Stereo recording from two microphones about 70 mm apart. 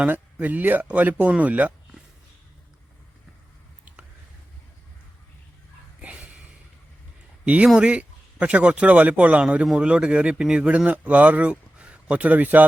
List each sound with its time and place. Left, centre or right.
0.0 s a man's voice: right
6.0 s a sound: centre
7.4 s a man's voice: centre